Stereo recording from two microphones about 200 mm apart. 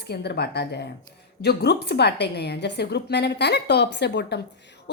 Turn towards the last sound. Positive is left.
turn(degrees=60)  # may be behind; listen again after turning